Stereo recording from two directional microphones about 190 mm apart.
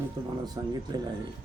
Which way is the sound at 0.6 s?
20° right (ahead or behind).